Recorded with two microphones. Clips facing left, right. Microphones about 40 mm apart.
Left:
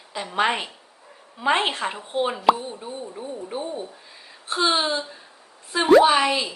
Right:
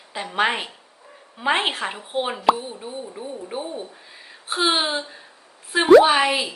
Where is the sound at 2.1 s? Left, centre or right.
Right.